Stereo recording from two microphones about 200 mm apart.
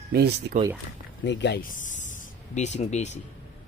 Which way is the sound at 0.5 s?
40° right (ahead or behind).